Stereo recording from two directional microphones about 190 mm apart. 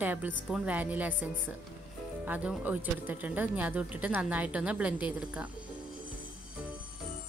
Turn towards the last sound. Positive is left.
turn(degrees=-5)  # may be behind; listen again after turning